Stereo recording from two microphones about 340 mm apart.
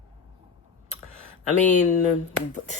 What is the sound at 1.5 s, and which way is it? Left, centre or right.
Speech, left.